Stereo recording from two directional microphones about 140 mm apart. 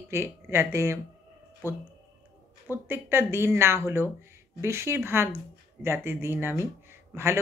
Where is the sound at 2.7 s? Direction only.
15° right (ahead or behind).